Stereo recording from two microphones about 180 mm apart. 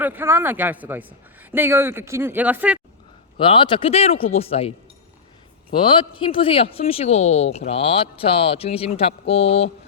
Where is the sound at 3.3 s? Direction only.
30° left (ahead or behind).